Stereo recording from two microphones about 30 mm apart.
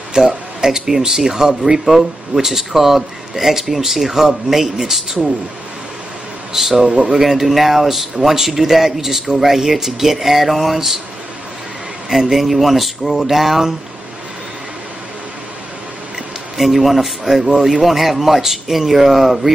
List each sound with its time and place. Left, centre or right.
0.1 s speech: right
6.5 s speech: centre
12.3 s speech: centre
16.5 s speech: centre